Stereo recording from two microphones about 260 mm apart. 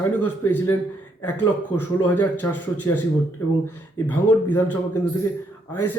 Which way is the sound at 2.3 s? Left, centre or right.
Left.